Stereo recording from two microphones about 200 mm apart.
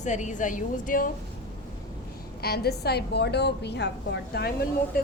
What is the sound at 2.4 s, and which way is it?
A woman's voice, 50° left (ahead or behind).